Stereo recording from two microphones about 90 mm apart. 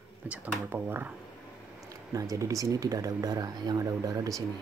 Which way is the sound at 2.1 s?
40° right (ahead or behind).